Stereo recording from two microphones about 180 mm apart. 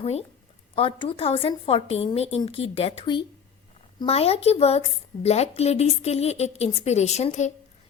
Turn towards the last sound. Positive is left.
turn(degrees=40)  # may be behind; listen again after turning